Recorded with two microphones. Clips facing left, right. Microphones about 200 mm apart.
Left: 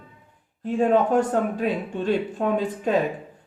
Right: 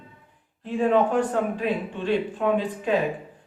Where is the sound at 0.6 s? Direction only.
45° left (ahead or behind).